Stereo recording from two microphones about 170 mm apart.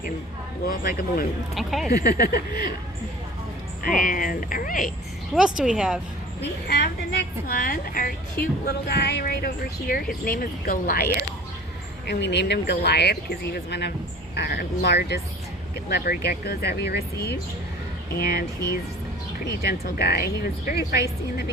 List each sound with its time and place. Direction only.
0.7 s speech: 55° left (ahead or behind)
1.5 s speech: centre (ahead or behind)
2.0 s speech: 65° left (ahead or behind)
3.8 s speech: 55° left (ahead or behind)
5.3 s speech: 5° right (ahead or behind)
6.7 s a woman's voice: 75° left (ahead or behind)
9.9 s speech: 55° left (ahead or behind)
12.0 s speech: 80° left
14.3 s a woman's voice: 70° left (ahead or behind)
19.5 s a woman's voice: 70° left (ahead or behind)